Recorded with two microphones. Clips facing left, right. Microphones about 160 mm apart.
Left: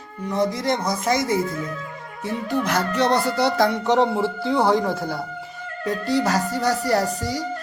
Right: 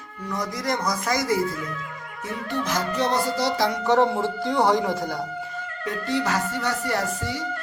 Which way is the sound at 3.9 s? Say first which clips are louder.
Even; 20° left (ahead or behind).